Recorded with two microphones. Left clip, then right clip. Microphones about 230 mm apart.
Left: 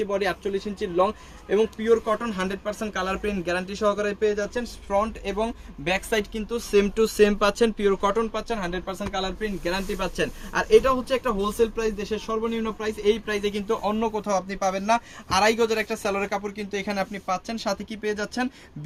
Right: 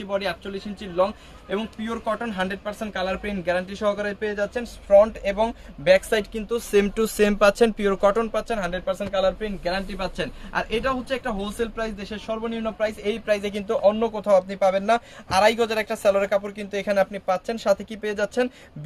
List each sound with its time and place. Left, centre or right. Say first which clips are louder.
0.1 s speech: right 4 dB; centre
1.5 s speech: left 8 dB; centre
9.6 s speech: right 1 dB; centre; by 18.4 s right